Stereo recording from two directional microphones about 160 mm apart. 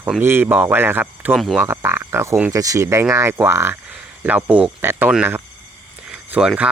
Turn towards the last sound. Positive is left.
turn(degrees=-5)  # may be behind; listen again after turning